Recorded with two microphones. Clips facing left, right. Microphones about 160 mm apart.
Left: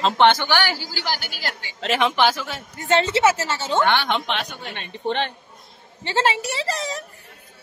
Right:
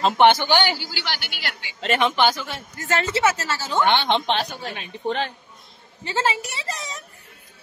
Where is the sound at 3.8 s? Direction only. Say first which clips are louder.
Right 2 dB; 20° right (ahead or behind).